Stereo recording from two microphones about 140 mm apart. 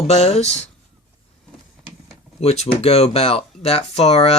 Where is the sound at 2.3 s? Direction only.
50° left (ahead or behind).